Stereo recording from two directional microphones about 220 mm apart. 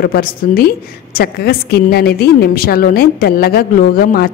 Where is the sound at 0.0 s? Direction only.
45° left (ahead or behind).